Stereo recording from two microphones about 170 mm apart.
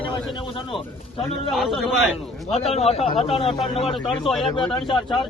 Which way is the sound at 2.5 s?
35° left (ahead or behind).